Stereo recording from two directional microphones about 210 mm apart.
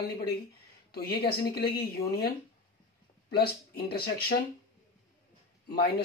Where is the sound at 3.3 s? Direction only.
50° left (ahead or behind).